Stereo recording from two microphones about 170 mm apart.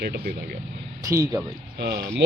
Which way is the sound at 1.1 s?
20° right (ahead or behind).